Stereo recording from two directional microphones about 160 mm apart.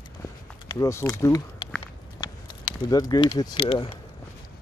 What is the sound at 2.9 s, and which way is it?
Speech, 25° left (ahead or behind).